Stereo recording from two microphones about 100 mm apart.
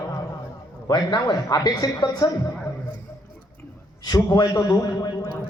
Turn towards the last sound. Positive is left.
turn(degrees=35)  # may be behind; listen again after turning